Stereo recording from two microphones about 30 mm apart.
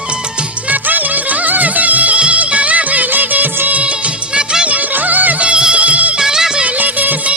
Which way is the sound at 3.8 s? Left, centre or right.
Right.